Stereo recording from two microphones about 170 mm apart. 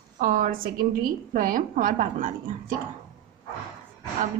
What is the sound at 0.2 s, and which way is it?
A woman's voice, 55° right (ahead or behind).